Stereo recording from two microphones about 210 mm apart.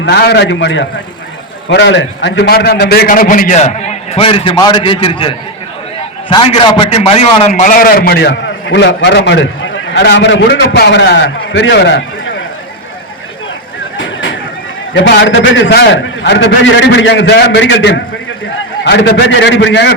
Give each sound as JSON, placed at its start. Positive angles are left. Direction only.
{"t": 0.0, "sound": "a man's voice", "side_deg": 50}
{"t": 14.0, "sound": "a sound", "side_deg": 60}
{"t": 14.9, "sound": "a man's voice", "side_deg": 60}